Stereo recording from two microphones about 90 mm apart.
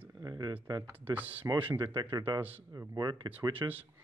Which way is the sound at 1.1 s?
20° right (ahead or behind).